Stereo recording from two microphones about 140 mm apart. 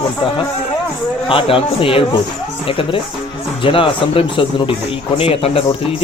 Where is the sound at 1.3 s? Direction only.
40° left (ahead or behind).